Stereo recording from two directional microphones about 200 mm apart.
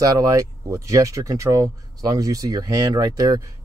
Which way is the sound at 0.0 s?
20° right (ahead or behind).